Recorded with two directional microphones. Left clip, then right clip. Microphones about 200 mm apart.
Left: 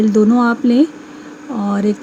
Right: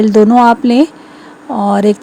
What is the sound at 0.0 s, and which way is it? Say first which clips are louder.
A woman's voice: right 7 dB; 35° right (ahead or behind).